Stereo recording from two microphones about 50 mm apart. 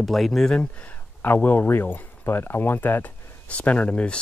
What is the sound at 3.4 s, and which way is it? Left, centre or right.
Speech, left.